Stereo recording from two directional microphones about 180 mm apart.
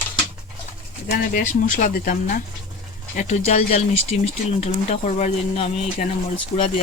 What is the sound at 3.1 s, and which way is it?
Speech, 40° left (ahead or behind).